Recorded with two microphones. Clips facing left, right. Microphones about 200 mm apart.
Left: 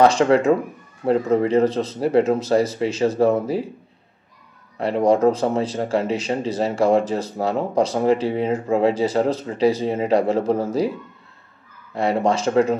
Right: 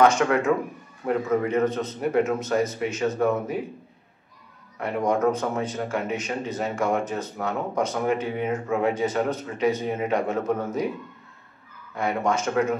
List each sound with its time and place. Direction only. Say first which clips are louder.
0.0 s speech: left 4 dB; 30° left (ahead or behind)
4.7 s speech: left 7 dB; 30° left (ahead or behind)
11.9 s speech: left 5 dB; 30° left (ahead or behind)